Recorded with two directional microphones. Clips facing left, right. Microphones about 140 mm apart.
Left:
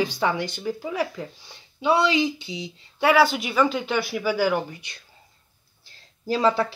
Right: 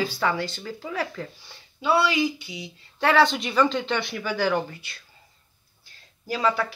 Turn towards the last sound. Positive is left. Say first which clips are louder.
# left 3 dB
turn(degrees=30)  # may be behind; listen again after turning